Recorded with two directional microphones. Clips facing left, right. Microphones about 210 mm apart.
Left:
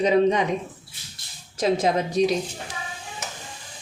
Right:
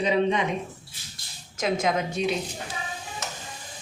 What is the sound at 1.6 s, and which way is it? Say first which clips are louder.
Speech: left 4 dB; 35° left (ahead or behind).